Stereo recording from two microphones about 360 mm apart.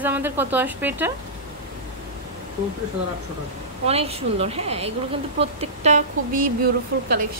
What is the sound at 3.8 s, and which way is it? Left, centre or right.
A woman's voice, centre.